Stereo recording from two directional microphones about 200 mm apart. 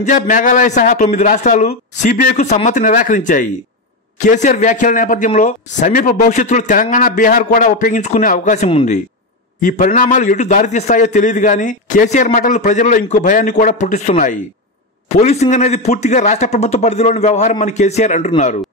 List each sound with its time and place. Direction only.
0.0 s speech: 40° left (ahead or behind)